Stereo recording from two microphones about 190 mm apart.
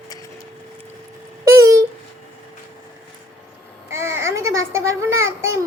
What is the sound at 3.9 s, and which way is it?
A child's voice, 15° right (ahead or behind).